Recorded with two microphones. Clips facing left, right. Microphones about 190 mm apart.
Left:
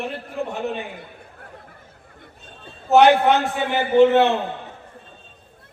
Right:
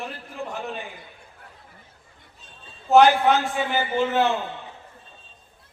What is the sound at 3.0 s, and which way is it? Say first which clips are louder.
A man's voice: left 3 dB; 65° left (ahead or behind).